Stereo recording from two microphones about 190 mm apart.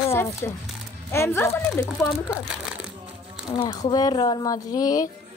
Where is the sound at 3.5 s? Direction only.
25° left (ahead or behind).